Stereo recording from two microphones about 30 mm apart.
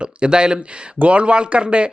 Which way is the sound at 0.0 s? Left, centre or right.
Right.